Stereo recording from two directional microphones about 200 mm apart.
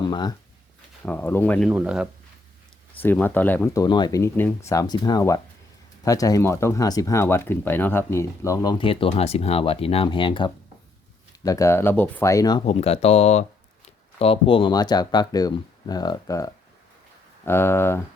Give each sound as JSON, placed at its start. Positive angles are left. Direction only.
{"t": 0.1, "sound": "speech", "side_deg": 20}
{"t": 1.0, "sound": "speech", "side_deg": 10}
{"t": 3.0, "sound": "speech", "side_deg": 10}
{"t": 3.8, "sound": "speech", "side_deg": 20}